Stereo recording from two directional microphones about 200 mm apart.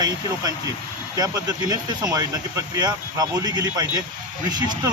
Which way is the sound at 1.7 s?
20° right (ahead or behind).